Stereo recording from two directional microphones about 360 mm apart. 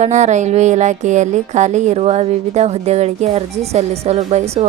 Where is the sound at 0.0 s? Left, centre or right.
Centre.